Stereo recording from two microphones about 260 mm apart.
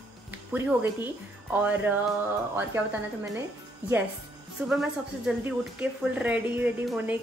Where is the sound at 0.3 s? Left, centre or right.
Centre.